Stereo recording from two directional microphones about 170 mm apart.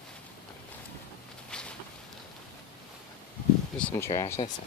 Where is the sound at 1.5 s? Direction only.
5° left (ahead or behind).